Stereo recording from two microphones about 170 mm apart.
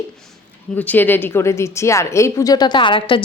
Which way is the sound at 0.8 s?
10° left (ahead or behind).